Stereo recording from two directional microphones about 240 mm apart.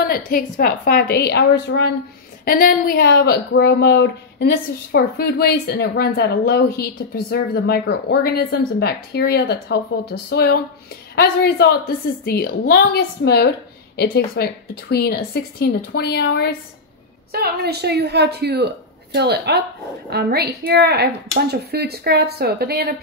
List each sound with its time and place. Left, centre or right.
0.0 s a woman's voice: left
17.3 s a woman's voice: right